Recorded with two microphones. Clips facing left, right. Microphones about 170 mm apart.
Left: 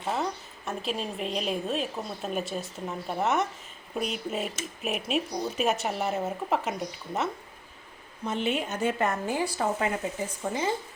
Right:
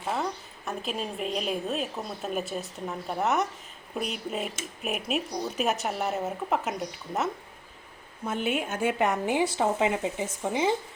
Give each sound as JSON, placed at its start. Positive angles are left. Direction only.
{"t": 0.1, "sound": "a woman's voice", "side_deg": 0}